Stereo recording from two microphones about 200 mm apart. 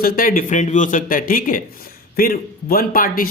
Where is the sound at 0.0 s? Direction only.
45° left (ahead or behind).